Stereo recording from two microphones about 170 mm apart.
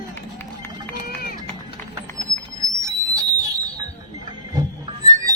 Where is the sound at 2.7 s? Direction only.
20° right (ahead or behind).